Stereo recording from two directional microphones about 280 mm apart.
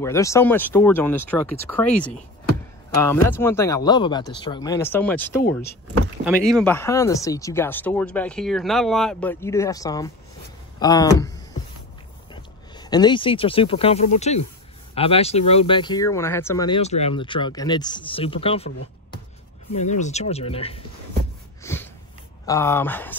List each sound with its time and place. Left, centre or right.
0.0 s speech: centre
19.7 s speech: left
21.7 s a sound: centre
22.5 s speech: centre